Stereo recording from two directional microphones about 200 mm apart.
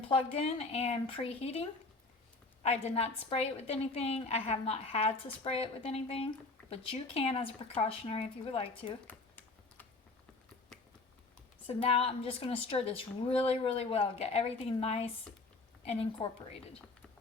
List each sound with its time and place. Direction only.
0.1 s a woman's voice: 30° left (ahead or behind)
2.6 s a woman's voice: 30° left (ahead or behind)
9.0 s typing: 10° left (ahead or behind)
11.6 s a woman's voice: 30° left (ahead or behind)